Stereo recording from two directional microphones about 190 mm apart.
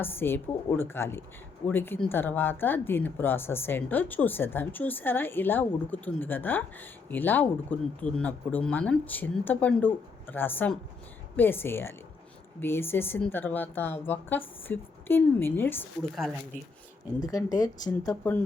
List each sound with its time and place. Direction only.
0.0 s speech: 10° left (ahead or behind)
17.2 s speech: 20° left (ahead or behind)